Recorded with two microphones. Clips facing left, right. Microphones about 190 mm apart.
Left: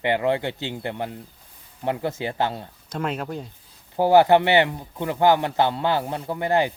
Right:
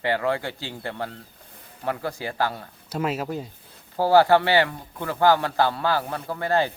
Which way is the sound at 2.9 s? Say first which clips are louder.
Right 1 dB; 5° right (ahead or behind).